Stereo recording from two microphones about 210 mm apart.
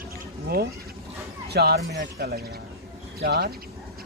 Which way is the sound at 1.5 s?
50° right (ahead or behind).